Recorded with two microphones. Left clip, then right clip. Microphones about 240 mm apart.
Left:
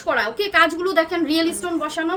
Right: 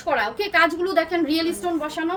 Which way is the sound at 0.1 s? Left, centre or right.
Centre.